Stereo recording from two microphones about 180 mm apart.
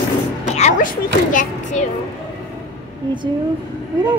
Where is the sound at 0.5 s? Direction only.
45° left (ahead or behind).